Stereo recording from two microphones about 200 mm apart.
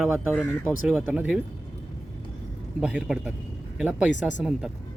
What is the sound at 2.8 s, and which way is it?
Speech, 5° right (ahead or behind).